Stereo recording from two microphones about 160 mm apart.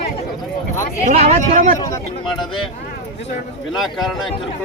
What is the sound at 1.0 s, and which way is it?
Speech, 45° right (ahead or behind).